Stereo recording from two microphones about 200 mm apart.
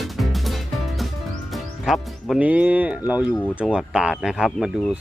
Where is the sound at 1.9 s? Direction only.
5° right (ahead or behind).